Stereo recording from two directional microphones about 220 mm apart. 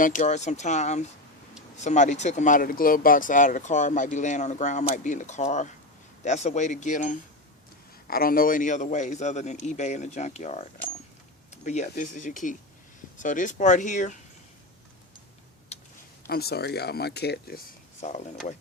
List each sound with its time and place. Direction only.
0.0 s speech: 35° left (ahead or behind)
16.2 s speech: 45° left (ahead or behind)